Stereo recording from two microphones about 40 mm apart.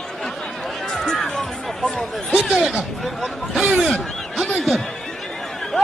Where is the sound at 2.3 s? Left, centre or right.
Centre.